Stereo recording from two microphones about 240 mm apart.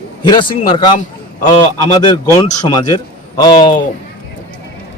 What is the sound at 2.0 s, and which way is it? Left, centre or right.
Speech, centre.